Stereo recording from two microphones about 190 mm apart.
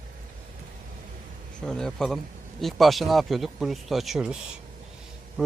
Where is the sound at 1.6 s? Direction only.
5° left (ahead or behind).